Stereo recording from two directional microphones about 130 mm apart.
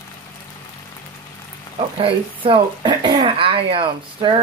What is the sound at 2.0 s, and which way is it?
Speech, 40° right (ahead or behind).